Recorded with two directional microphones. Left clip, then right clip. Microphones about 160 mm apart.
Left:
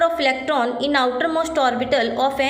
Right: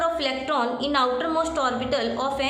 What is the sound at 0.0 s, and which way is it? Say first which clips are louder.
A woman's voice: left 6 dB; 25° left (ahead or behind).